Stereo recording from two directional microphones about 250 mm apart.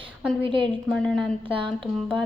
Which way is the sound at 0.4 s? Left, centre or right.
Right.